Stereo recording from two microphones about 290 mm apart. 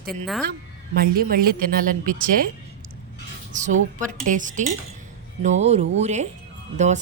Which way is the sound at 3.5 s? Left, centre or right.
Right.